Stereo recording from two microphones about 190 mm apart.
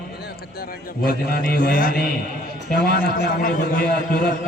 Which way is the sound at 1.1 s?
50° left (ahead or behind).